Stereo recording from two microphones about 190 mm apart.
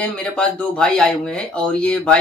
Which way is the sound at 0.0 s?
5° left (ahead or behind).